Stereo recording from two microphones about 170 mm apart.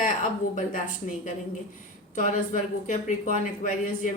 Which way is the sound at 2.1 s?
45° left (ahead or behind).